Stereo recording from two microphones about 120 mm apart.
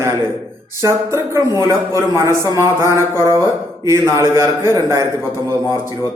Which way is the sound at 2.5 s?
25° right (ahead or behind).